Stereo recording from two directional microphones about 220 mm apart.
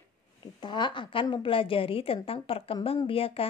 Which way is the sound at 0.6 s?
20° left (ahead or behind).